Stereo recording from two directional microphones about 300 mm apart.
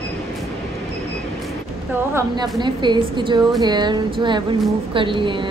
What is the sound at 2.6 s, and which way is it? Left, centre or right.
A woman's voice, centre.